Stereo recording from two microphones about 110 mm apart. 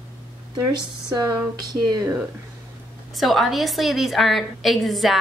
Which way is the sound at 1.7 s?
35° right (ahead or behind).